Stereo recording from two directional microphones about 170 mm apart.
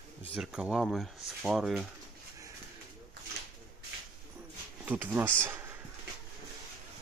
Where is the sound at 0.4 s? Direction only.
5° right (ahead or behind).